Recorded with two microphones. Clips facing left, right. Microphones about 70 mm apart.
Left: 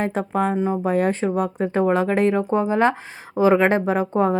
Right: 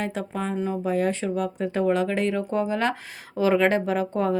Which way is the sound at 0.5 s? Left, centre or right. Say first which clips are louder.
Left 5 dB; left.